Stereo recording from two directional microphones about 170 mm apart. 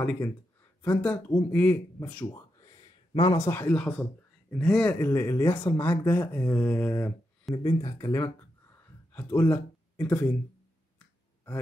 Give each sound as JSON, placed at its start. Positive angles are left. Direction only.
{"t": 0.0, "sound": "speech", "side_deg": 10}
{"t": 2.3, "sound": "speech", "side_deg": 20}